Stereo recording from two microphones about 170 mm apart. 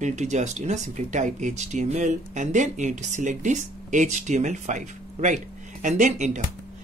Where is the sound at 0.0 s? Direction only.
45° right (ahead or behind).